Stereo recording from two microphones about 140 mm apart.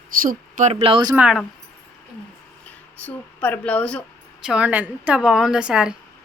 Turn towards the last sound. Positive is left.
turn(degrees=-5)  # may be behind; listen again after turning